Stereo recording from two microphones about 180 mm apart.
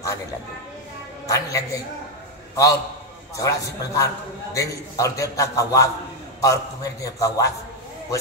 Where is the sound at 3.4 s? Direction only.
20° left (ahead or behind).